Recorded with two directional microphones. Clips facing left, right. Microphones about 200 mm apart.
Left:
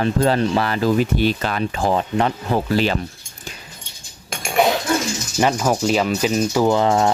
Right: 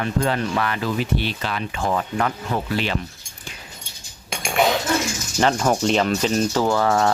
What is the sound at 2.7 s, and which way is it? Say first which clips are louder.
Speech: left 6 dB; 40° left (ahead or behind).